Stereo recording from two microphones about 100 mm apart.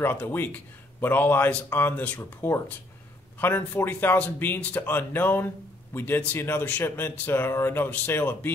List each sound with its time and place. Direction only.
0.0 s speech: 20° left (ahead or behind)